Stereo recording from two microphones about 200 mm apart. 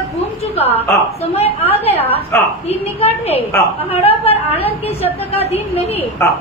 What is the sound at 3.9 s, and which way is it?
Speech, 30° left (ahead or behind).